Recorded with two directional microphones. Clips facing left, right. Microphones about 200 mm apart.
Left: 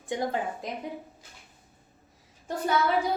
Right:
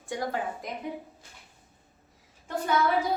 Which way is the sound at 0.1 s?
20° left (ahead or behind).